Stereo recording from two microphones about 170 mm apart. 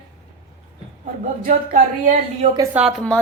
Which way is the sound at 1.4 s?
60° right (ahead or behind).